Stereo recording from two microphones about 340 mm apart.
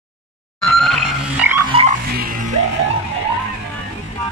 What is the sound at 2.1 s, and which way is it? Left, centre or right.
Music, right.